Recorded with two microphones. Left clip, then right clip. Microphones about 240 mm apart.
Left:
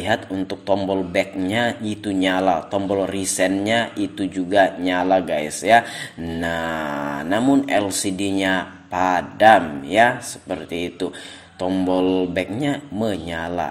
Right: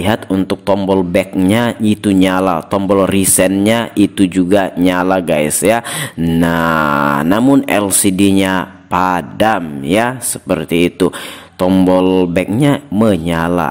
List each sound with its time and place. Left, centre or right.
0.0 s a man's voice: right